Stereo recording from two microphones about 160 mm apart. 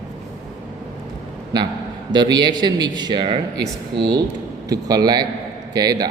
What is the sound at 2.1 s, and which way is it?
A man's voice, 25° right (ahead or behind).